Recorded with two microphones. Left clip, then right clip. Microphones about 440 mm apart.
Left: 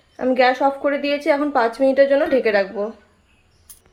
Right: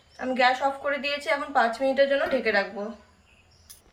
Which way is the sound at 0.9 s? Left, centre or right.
Centre.